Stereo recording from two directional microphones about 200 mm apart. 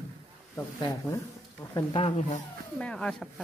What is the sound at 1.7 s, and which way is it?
Speech, 25° left (ahead or behind).